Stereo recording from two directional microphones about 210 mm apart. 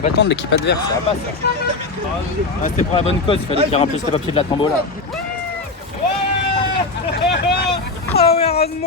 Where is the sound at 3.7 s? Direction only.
30° left (ahead or behind).